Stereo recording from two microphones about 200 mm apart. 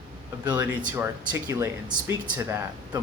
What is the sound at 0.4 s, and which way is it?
Speech, 20° right (ahead or behind).